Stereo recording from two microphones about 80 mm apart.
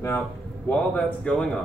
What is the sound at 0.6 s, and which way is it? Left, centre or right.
Speech, centre.